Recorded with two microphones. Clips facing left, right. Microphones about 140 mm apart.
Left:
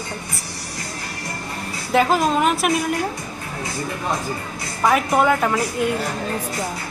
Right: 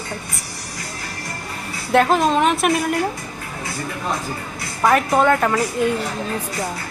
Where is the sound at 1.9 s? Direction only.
Centre (ahead or behind).